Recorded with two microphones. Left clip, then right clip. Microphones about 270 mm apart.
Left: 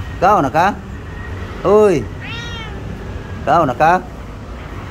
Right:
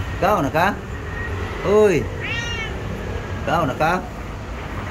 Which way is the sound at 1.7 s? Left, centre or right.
Centre.